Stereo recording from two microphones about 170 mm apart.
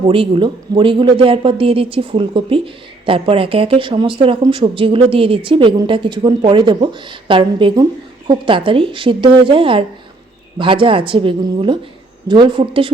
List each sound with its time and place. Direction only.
0.1 s speech: 30° right (ahead or behind)